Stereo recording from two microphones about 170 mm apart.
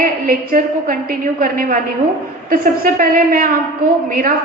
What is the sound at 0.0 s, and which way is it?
A woman's voice, 55° right (ahead or behind).